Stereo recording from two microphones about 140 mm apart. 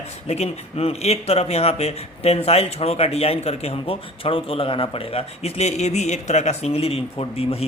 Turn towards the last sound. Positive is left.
turn(degrees=45)  # may be behind; listen again after turning